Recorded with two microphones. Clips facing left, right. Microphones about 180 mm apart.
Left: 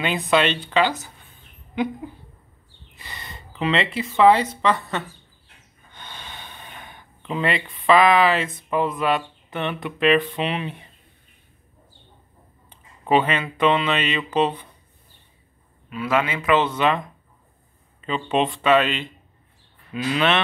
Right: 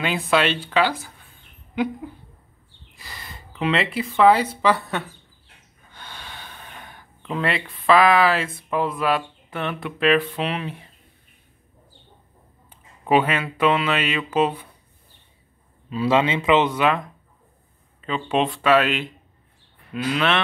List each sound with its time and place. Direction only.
0.0 s speech: 5° right (ahead or behind)
3.0 s speech: 5° right (ahead or behind)
5.9 s gasp: 5° right (ahead or behind)
8.6 s speech: centre (ahead or behind)
12.6 s speech: 5° right (ahead or behind)
15.9 s speech: 25° right (ahead or behind); by 20.4 s centre (ahead or behind)